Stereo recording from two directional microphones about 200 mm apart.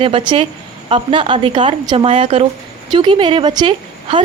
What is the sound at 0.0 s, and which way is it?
A woman's voice, 25° right (ahead or behind).